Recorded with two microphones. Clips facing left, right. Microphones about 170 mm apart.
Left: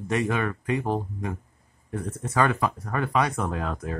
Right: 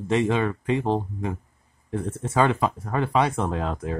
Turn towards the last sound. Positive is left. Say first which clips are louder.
# right 2 dB
turn(degrees=-25)  # may be behind; listen again after turning